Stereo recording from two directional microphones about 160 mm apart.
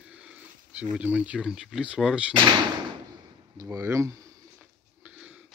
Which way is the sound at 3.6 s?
20° right (ahead or behind).